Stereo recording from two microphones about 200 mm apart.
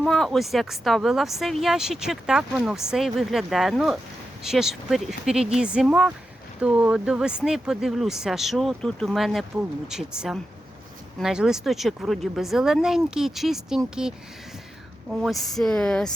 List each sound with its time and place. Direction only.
0.0 s speech: centre (ahead or behind)
15.1 s speech: centre (ahead or behind)